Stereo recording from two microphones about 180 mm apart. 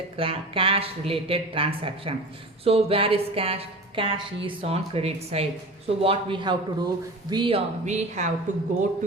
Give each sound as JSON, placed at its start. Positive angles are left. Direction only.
{"t": 0.2, "sound": "a woman's voice", "side_deg": -30}